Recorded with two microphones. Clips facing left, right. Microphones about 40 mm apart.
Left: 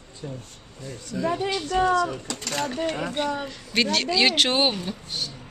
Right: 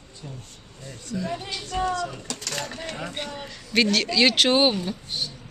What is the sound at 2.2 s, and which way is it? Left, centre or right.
Speech, left.